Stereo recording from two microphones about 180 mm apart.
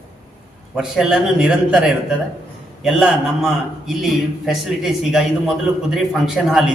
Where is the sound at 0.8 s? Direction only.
5° right (ahead or behind).